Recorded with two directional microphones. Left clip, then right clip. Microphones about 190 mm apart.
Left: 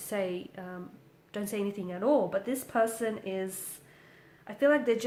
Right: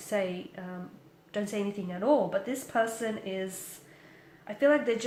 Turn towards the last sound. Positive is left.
turn(degrees=35)  # may be behind; listen again after turning